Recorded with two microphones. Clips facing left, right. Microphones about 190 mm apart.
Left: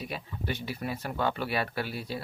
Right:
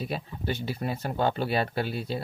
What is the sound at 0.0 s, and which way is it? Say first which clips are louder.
Speech: right 4 dB; 30° right (ahead or behind).